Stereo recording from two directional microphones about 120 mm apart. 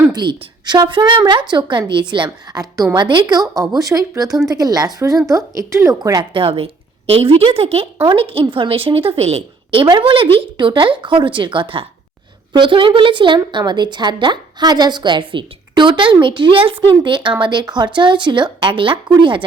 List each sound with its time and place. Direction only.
0.1 s a woman's voice: 35° right (ahead or behind)
6.3 s a woman's voice: 50° right (ahead or behind)
9.9 s a woman's voice: 45° right (ahead or behind)